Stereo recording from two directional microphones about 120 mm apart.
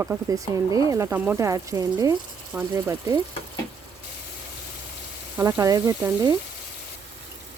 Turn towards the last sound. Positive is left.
turn(degrees=-25)  # may be behind; listen again after turning